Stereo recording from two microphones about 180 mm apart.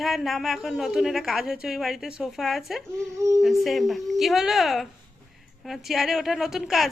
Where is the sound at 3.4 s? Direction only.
Centre (ahead or behind).